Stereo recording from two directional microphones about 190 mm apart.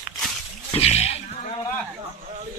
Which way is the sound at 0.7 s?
35° left (ahead or behind).